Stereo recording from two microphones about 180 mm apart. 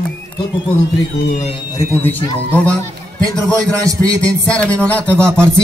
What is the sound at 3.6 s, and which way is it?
Speech, 20° right (ahead or behind).